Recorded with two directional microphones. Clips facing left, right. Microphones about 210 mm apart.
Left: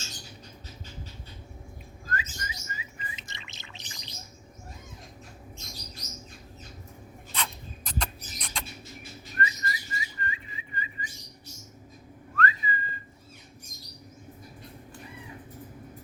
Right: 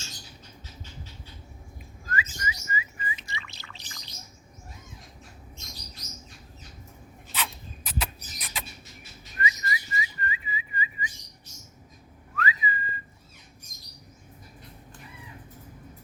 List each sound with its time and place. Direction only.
2.0 s whistling: 5° right (ahead or behind)
3.2 s bird: 20° left (ahead or behind)
7.3 s rodents: 5° right (ahead or behind)
9.4 s whistling: 5° right (ahead or behind)
12.4 s whistling: 5° right (ahead or behind)